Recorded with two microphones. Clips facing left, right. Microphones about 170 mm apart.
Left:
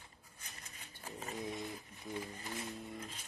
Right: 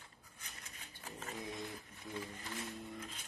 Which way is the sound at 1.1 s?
15° left (ahead or behind).